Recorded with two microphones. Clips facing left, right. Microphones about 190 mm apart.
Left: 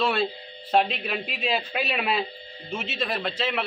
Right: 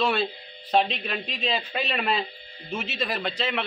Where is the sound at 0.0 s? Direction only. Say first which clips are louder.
Even; centre (ahead or behind).